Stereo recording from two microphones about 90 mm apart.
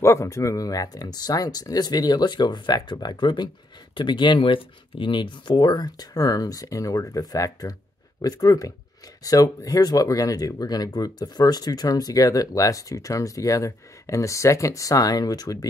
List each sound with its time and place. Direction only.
0.0 s speech: 35° left (ahead or behind)